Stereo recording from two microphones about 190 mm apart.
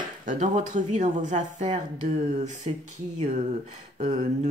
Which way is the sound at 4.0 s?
35° right (ahead or behind).